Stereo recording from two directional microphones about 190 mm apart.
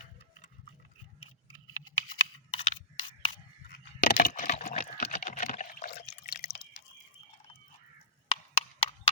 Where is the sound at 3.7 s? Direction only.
55° left (ahead or behind).